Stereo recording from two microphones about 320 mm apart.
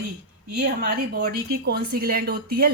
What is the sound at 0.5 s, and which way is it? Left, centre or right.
Speech, right.